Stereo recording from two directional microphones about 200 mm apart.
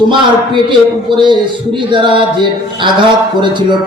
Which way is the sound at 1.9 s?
25° right (ahead or behind).